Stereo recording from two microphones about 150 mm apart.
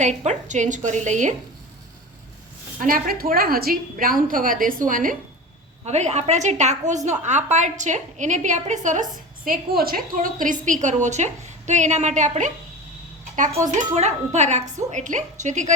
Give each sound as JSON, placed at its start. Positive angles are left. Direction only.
{"t": 0.3, "sound": "a woman's voice", "side_deg": -55}
{"t": 2.8, "sound": "a woman's voice", "side_deg": -75}
{"t": 5.8, "sound": "a woman's voice", "side_deg": -45}
{"t": 9.1, "sound": "a woman's voice", "side_deg": -70}
{"t": 13.7, "sound": "a woman's voice", "side_deg": -50}